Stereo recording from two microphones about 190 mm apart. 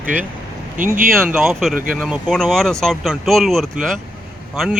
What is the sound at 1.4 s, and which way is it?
Speech, centre (ahead or behind).